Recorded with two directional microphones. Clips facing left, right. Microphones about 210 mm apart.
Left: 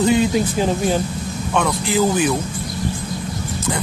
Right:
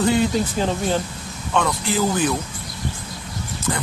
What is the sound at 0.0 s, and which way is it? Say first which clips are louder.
Speech: left 3 dB; 15° left (ahead or behind).